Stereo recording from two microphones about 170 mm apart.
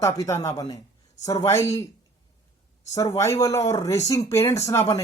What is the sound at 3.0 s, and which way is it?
Speech, 20° left (ahead or behind).